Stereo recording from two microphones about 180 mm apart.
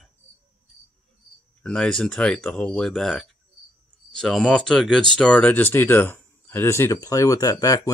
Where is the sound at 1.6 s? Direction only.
5° left (ahead or behind).